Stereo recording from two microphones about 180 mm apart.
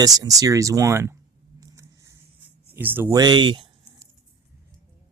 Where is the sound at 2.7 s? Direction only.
10° right (ahead or behind); by 4.1 s 25° right (ahead or behind).